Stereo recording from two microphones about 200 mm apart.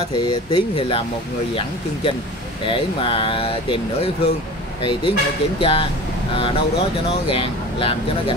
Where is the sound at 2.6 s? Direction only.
25° left (ahead or behind).